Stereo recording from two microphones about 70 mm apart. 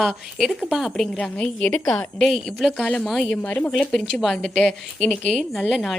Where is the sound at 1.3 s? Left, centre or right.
Centre.